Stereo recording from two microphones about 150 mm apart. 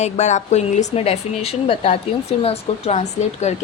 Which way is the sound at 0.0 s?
50° left (ahead or behind).